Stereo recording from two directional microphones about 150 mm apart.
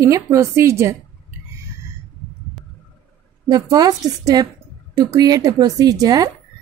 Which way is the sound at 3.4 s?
30° right (ahead or behind).